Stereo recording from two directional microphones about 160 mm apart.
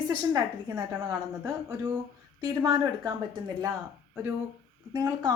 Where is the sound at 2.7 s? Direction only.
25° right (ahead or behind).